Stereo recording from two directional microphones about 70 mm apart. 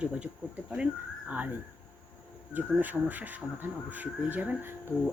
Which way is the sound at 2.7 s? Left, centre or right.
Right.